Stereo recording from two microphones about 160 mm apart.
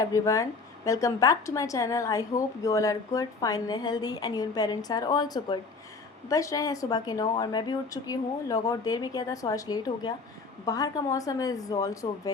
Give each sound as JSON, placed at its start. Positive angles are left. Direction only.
{"t": 0.0, "sound": "a woman's voice", "side_deg": 20}